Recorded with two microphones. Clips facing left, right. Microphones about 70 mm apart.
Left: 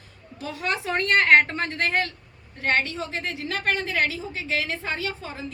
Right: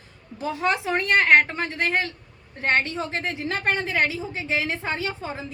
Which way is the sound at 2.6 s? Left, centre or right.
Right.